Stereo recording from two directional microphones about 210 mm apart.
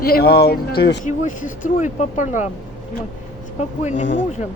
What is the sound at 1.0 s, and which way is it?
Speech, 35° left (ahead or behind).